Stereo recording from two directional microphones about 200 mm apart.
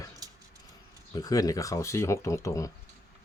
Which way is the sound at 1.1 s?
20° left (ahead or behind).